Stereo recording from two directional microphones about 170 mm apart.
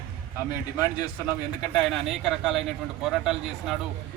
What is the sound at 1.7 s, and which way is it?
A man's voice, 5° left (ahead or behind).